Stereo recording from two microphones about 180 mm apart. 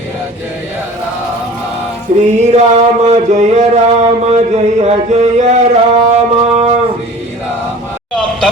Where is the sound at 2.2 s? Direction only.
40° right (ahead or behind).